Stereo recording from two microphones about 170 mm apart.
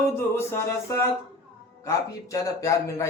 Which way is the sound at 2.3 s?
20° left (ahead or behind).